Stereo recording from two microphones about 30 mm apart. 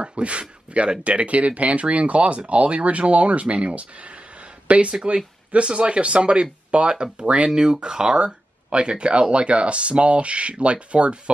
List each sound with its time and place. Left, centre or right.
0.0 s speech: right